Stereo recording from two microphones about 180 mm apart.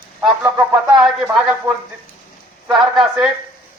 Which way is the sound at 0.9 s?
5° right (ahead or behind).